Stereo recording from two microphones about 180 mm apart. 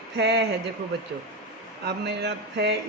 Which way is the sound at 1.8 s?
70° right (ahead or behind).